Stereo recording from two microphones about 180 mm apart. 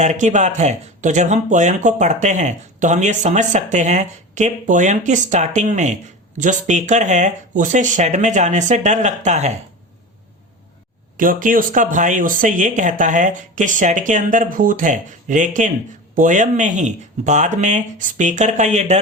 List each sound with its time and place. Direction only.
0.0 s speech: 40° right (ahead or behind)
11.2 s speech: 50° right (ahead or behind)